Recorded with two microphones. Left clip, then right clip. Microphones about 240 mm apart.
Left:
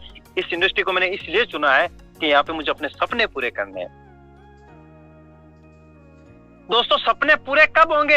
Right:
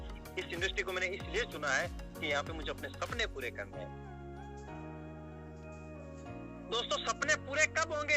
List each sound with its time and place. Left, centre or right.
0.3 s speech: centre
6.7 s speech: centre